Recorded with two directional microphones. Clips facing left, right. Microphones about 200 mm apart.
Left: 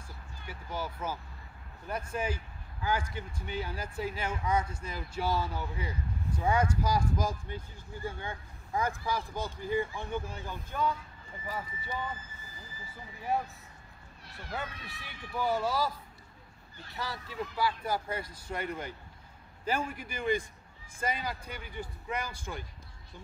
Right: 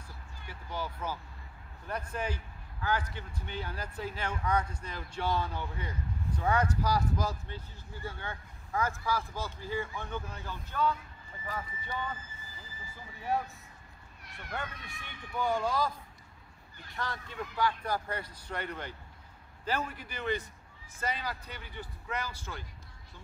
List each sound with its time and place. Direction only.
0.5 s speech: 10° left (ahead or behind)
13.3 s speech: centre (ahead or behind)
14.2 s speech: 30° left (ahead or behind)
14.5 s speech: 5° left (ahead or behind)
16.9 s speech: 5° left (ahead or behind)